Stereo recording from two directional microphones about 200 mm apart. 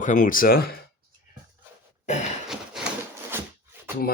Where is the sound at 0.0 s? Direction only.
40° left (ahead or behind).